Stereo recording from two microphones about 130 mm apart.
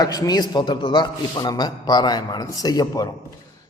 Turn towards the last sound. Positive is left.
turn(degrees=30)  # may be behind; listen again after turning